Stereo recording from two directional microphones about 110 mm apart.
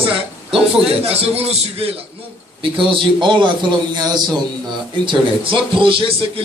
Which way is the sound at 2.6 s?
50° right (ahead or behind).